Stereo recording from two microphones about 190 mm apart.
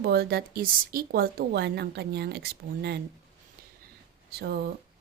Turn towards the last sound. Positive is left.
turn(degrees=-55)  # may be behind; listen again after turning